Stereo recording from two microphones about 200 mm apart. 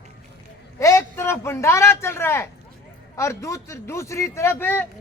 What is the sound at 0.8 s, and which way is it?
A man's voice, 15° left (ahead or behind).